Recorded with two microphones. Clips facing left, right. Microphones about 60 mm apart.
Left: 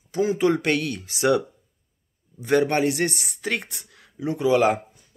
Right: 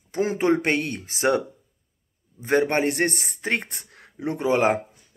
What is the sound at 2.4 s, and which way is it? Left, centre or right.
Speech, right.